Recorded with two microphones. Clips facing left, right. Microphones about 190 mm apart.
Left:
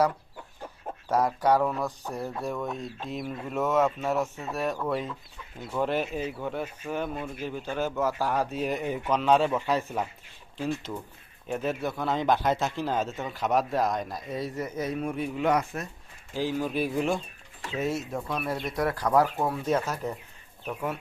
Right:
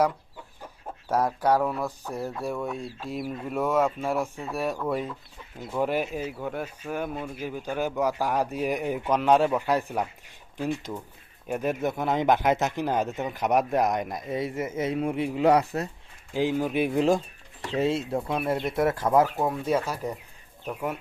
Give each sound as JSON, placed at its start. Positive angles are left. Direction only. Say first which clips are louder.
{"t": 1.0, "sound": "speech", "louder": "even", "side_deg": -10}
{"t": 16.3, "sound": "speech", "louder": "right 3 dB", "side_deg": -15}
{"t": 19.4, "sound": "speech", "louder": "right 1 dB", "side_deg": -10}